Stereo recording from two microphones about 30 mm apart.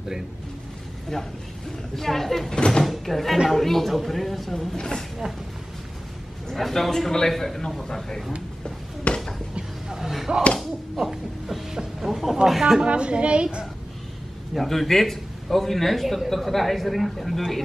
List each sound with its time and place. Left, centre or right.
1.1 s a man's voice: centre
2.5 s speech: left
2.8 s a man's voice: centre
6.5 s a man's voice: centre
9.1 s a sound: left
9.8 s slam: centre
11.0 s hoot: centre
12.0 s a sound: centre
12.4 s speech: centre
12.8 s a woman's voice: right
14.5 s a man's voice: centre